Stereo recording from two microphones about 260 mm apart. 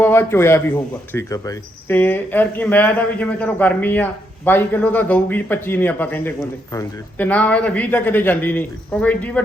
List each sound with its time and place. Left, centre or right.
0.0 s speech: centre